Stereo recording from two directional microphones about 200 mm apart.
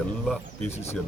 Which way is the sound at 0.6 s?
30° left (ahead or behind).